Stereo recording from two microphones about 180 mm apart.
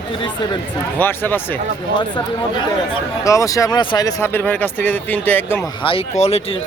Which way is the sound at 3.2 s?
15° left (ahead or behind).